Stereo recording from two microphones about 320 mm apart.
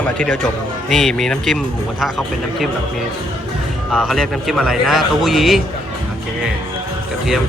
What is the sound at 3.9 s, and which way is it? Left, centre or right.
Speech, centre.